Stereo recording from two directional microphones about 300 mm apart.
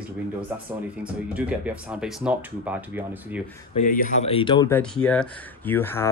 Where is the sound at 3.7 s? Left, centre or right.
Left.